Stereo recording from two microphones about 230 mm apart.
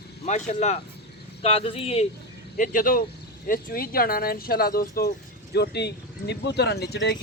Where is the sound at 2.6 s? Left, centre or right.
Left.